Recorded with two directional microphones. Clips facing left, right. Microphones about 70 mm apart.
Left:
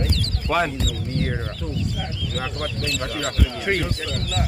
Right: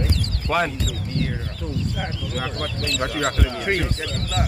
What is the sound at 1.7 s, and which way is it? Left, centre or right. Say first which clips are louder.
Speech: right 3 dB; right.